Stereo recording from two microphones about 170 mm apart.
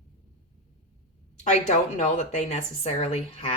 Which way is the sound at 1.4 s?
45° left (ahead or behind).